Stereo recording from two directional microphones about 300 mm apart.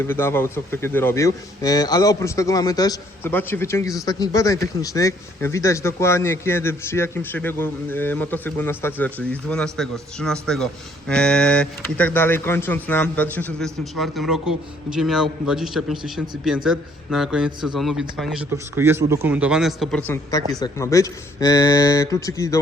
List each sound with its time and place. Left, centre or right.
0.0 s speech: centre